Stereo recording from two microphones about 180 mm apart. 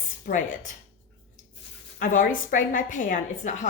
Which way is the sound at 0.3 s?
55° left (ahead or behind).